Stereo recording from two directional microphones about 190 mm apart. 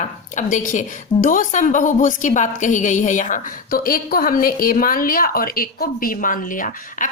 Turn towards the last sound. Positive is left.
turn(degrees=45)  # may be behind; listen again after turning